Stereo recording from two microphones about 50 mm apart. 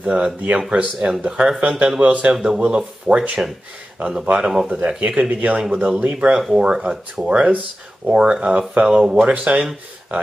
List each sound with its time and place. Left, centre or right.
0.0 s speech: right
2.3 s speech: centre
4.7 s a man's voice: right
9.3 s speech: right